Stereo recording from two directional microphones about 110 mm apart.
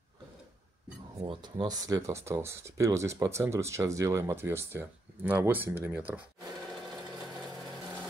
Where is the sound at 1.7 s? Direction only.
30° right (ahead or behind); by 6.2 s 15° right (ahead or behind).